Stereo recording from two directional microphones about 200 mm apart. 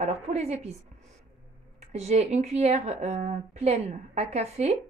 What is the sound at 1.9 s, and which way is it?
Speech, 35° right (ahead or behind).